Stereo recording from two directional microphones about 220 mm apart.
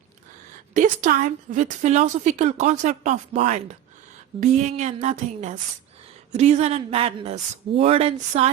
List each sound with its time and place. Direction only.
0.7 s a woman's voice: 35° right (ahead or behind)